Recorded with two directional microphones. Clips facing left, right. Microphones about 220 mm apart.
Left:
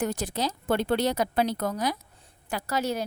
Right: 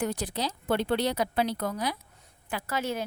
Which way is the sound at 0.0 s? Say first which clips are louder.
Left 2 dB; 45° left (ahead or behind).